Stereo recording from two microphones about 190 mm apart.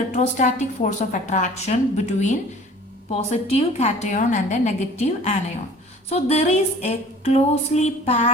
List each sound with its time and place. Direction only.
0.1 s a woman's voice: 40° left (ahead or behind)